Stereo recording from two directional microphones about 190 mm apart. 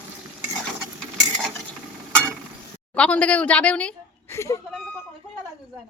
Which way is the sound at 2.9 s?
5° left (ahead or behind).